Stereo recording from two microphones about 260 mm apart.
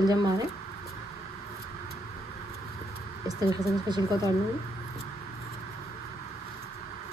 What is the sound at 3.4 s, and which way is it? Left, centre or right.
Speech, centre.